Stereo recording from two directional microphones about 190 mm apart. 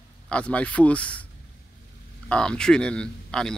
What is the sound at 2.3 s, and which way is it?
Speech, 5° left (ahead or behind).